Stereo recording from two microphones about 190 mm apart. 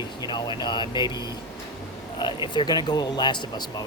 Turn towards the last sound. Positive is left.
turn(degrees=20)  # may be behind; listen again after turning